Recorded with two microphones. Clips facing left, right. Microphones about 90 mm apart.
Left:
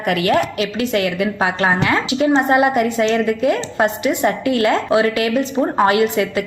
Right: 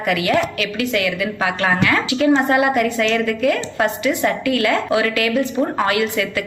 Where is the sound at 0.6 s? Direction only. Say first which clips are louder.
Left 2 dB; 30° left (ahead or behind).